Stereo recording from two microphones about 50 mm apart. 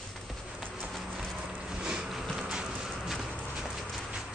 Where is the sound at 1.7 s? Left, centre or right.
Centre.